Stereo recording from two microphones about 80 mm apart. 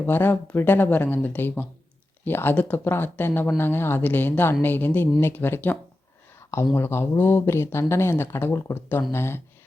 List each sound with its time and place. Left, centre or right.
0.0 s speech: left
6.7 s speech: left